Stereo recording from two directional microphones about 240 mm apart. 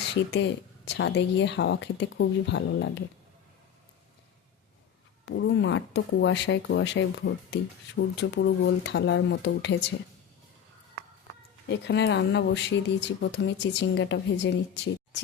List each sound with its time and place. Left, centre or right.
0.3 s speech: left
5.2 s speech: left
11.7 s speech: left
15.1 s a sound: left